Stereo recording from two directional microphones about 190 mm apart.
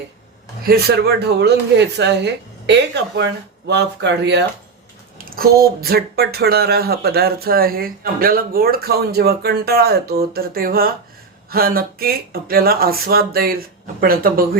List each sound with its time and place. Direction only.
0.6 s speech: 55° right (ahead or behind)
5.1 s speech: 50° right (ahead or behind)